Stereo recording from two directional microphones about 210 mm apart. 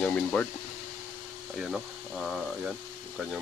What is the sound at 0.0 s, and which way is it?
Speech, 5° left (ahead or behind).